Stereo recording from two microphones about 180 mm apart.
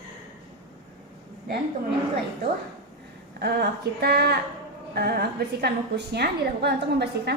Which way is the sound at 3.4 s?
60° right (ahead or behind).